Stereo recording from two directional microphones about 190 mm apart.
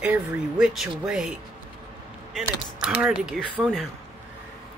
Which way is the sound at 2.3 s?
5° right (ahead or behind).